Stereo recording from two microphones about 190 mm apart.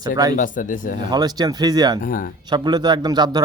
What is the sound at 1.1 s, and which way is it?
Speech, 20° right (ahead or behind).